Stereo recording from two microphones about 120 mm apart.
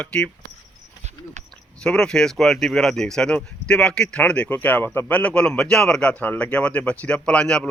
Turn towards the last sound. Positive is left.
turn(degrees=5)  # may be behind; listen again after turning